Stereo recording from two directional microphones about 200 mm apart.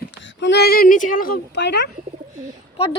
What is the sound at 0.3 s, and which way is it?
Female singing, 60° left (ahead or behind).